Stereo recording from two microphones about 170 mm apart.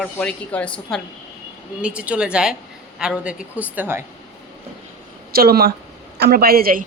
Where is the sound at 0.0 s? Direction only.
5° left (ahead or behind).